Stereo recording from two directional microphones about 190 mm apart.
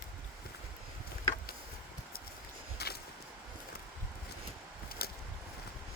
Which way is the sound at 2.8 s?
55° left (ahead or behind).